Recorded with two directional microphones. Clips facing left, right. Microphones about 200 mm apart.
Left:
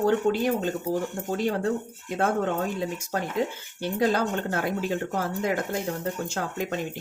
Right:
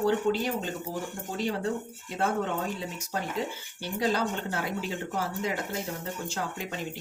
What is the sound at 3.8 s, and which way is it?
Speech, 50° left (ahead or behind).